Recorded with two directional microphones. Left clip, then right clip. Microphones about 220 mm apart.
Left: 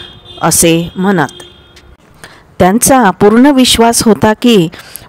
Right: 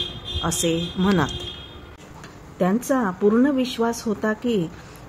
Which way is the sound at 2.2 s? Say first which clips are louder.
Left 14 dB; 45° left (ahead or behind).